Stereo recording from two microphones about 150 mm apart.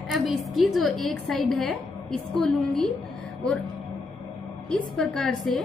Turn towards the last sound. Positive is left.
turn(degrees=0)  # may be behind; listen again after turning